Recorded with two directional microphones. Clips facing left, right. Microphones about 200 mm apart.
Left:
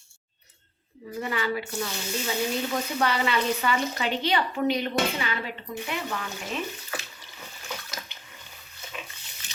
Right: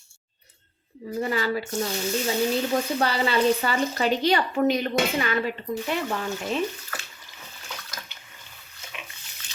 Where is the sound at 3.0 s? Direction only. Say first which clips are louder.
Right 3 dB; 35° right (ahead or behind).